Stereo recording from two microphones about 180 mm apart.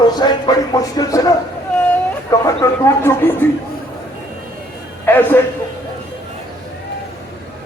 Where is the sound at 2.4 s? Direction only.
15° left (ahead or behind).